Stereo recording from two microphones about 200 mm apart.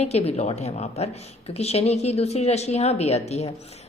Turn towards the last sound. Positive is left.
turn(degrees=35)  # may be behind; listen again after turning